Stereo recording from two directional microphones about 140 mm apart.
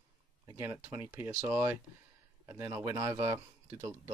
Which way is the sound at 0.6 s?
15° right (ahead or behind).